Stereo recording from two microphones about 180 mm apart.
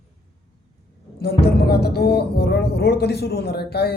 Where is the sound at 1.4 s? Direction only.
65° left (ahead or behind).